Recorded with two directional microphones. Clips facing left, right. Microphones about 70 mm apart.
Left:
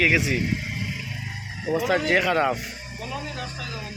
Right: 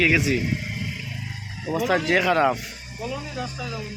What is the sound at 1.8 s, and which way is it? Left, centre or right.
Speech, centre.